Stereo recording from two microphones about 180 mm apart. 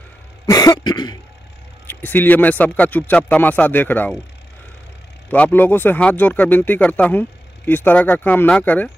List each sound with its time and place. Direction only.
0.5 s throat clearing: 20° left (ahead or behind)
1.9 s speech: 10° left (ahead or behind)
5.3 s speech: 10° left (ahead or behind)